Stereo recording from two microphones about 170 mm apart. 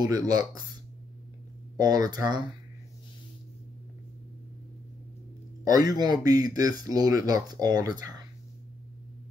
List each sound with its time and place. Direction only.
0.0 s speech: 20° right (ahead or behind)
1.8 s speech: 20° right (ahead or behind)
5.6 s speech: 20° right (ahead or behind)